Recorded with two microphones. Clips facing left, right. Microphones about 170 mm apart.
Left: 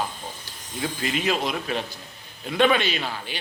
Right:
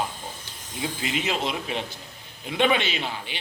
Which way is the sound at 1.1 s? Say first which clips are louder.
Left 2 dB; 20° right (ahead or behind).